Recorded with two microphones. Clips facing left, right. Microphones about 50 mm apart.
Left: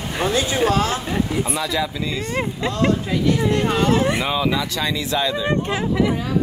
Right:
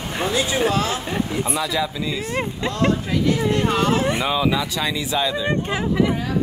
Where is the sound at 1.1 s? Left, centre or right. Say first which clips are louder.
Left 1 dB; centre.